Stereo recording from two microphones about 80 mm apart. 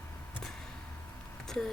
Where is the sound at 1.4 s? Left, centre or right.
Centre.